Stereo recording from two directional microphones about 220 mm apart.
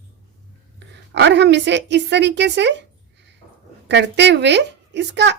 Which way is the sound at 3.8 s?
50° right (ahead or behind).